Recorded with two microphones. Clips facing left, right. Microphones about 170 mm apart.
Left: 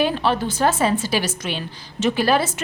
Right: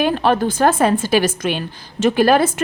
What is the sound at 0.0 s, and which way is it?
A woman's voice, 50° right (ahead or behind).